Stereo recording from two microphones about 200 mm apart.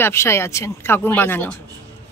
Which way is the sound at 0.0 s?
10° left (ahead or behind).